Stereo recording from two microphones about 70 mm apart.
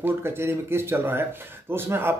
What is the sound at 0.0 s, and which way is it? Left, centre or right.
Speech, right.